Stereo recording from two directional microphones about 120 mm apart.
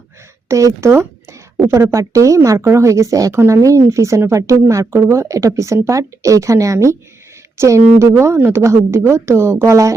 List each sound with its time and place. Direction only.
0.4 s speech: 25° right (ahead or behind)